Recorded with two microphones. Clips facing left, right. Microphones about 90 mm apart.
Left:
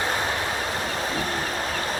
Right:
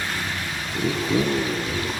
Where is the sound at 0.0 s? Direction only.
35° left (ahead or behind).